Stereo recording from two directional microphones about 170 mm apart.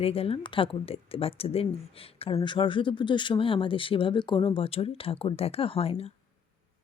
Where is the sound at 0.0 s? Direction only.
35° left (ahead or behind).